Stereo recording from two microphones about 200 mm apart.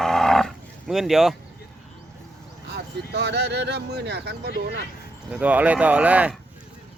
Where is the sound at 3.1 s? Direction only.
55° right (ahead or behind).